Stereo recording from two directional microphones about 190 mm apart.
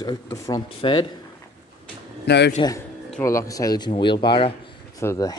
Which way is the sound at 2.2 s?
60° left (ahead or behind).